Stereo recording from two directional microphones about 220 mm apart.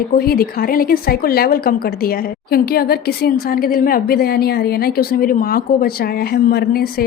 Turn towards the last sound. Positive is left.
turn(degrees=45)  # may be behind; listen again after turning